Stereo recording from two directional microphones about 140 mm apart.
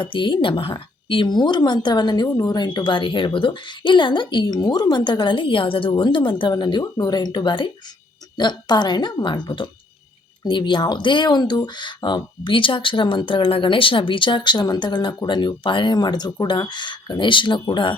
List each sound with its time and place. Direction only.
0.0 s a woman's voice: 35° left (ahead or behind)